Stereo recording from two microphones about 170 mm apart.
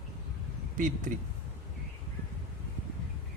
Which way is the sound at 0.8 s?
50° right (ahead or behind).